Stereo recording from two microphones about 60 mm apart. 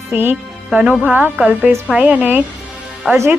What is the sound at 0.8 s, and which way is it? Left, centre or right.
A woman's voice, right.